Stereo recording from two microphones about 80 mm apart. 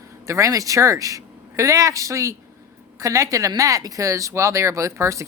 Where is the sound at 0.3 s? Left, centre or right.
Right.